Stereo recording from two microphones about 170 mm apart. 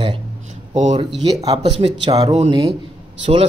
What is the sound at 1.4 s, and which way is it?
Speech, 30° right (ahead or behind).